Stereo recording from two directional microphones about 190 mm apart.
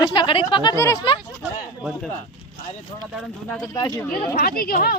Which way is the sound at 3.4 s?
10° left (ahead or behind).